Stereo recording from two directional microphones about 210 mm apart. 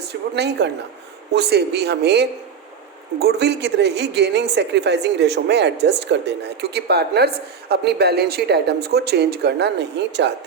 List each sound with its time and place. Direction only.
0.0 s a woman's voice: 50° right (ahead or behind)